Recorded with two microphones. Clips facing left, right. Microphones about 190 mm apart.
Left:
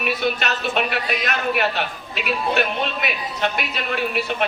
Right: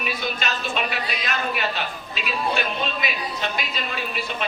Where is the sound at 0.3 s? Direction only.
60° left (ahead or behind).